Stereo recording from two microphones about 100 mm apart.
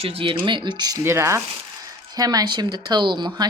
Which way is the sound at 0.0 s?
60° right (ahead or behind).